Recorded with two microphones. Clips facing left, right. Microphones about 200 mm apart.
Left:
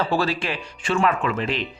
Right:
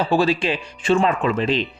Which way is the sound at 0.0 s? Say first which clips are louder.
Right 4 dB; 15° right (ahead or behind).